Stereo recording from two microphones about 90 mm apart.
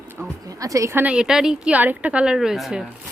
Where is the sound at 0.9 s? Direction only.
15° right (ahead or behind).